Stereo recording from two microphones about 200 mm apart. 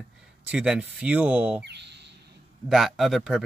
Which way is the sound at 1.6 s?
60° right (ahead or behind).